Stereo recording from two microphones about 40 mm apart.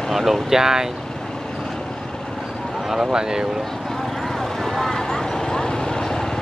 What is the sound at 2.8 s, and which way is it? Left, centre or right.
Speech, centre.